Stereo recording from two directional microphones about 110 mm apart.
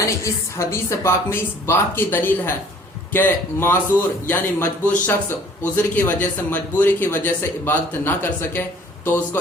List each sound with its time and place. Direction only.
0.0 s speech: 25° left (ahead or behind)